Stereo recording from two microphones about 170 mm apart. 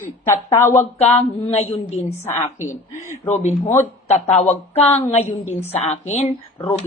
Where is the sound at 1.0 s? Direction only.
40° left (ahead or behind).